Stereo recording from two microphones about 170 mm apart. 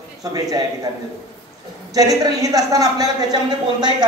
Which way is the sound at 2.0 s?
20° right (ahead or behind).